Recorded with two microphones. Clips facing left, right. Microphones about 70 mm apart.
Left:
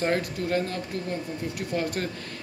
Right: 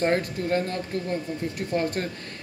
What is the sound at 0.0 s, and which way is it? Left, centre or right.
Speech, right.